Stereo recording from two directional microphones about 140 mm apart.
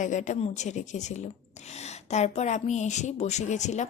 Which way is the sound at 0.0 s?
60° left (ahead or behind).